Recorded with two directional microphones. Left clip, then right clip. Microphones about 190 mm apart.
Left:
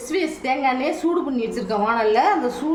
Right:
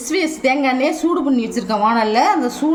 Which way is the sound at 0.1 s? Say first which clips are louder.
Right 5 dB; 45° right (ahead or behind).